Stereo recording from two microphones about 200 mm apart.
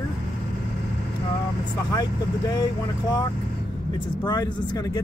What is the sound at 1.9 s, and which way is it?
Speech, 20° left (ahead or behind).